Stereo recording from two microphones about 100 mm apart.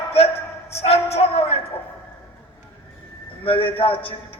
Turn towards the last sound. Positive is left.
turn(degrees=65)  # may be behind; listen again after turning